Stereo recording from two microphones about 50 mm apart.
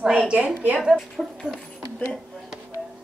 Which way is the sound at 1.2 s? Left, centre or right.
Centre.